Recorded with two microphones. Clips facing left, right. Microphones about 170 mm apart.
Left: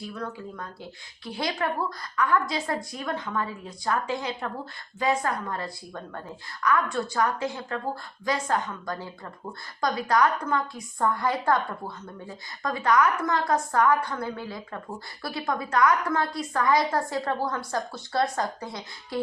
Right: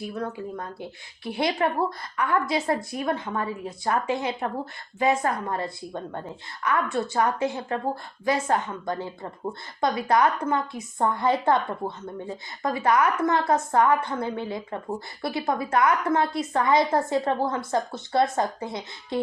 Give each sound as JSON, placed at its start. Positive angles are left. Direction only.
{"t": 0.1, "sound": "a woman's voice", "side_deg": -25}